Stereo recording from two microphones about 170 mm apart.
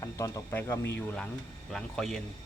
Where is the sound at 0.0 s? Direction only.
20° left (ahead or behind).